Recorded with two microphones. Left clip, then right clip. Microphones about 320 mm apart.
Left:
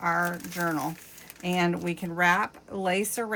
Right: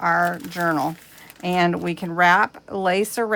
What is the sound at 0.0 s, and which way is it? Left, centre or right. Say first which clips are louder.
Speech: right 7 dB; right.